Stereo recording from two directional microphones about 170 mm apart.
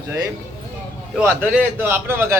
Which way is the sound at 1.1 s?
10° right (ahead or behind).